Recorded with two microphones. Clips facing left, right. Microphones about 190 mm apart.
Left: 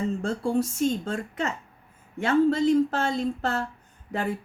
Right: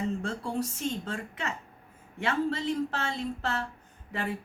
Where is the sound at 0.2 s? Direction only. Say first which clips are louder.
Left 7 dB; 45° left (ahead or behind).